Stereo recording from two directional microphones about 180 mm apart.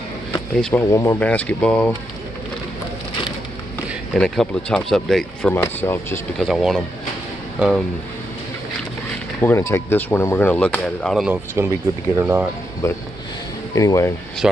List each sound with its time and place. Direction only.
0.6 s speech: 5° left (ahead or behind)
0.8 s speech: 15° left (ahead or behind)
4.1 s speech: 5° left (ahead or behind)
6.4 s speech: centre (ahead or behind)
9.4 s speech: 15° left (ahead or behind)
11.6 s speech: 15° right (ahead or behind)
12.8 s speech: 15° left (ahead or behind)
14.4 s speech: 5° right (ahead or behind)